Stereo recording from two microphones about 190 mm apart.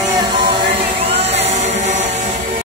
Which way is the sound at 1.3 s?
40° right (ahead or behind).